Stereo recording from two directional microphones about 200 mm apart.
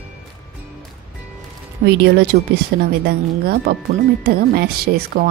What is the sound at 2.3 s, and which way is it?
A woman's voice, 50° right (ahead or behind).